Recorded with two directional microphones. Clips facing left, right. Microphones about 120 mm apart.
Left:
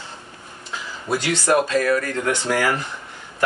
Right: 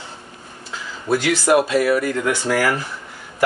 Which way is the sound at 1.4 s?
10° right (ahead or behind).